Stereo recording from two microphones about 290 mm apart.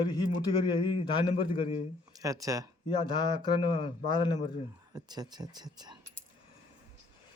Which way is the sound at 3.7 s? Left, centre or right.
Centre.